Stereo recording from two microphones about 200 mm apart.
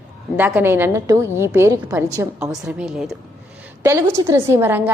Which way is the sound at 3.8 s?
15° right (ahead or behind).